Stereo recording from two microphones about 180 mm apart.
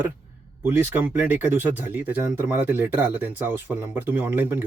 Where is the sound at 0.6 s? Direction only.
10° right (ahead or behind).